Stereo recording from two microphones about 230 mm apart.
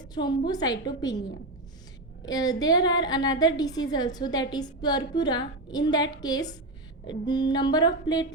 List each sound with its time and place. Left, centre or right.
0.1 s a woman's voice: centre
2.2 s a woman's voice: centre
7.1 s a sound: centre